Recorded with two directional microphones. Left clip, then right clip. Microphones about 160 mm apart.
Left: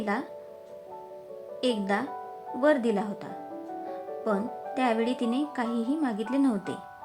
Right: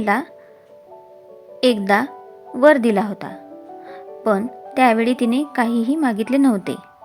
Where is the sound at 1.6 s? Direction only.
45° right (ahead or behind).